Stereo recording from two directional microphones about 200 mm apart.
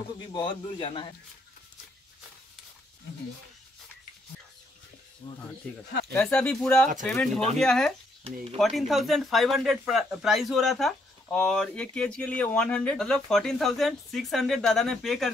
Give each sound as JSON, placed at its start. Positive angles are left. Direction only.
{"t": 0.3, "sound": "a man's voice", "side_deg": 25}
{"t": 5.2, "sound": "a man's voice", "side_deg": 25}
{"t": 6.1, "sound": "speech", "side_deg": 5}